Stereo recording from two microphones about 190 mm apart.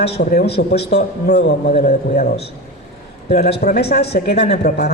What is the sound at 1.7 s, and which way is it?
Speech, 35° left (ahead or behind).